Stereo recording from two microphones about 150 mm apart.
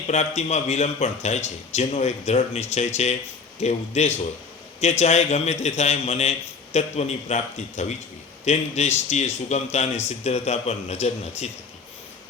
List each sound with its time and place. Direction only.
0.1 s a man's voice: 50° left (ahead or behind)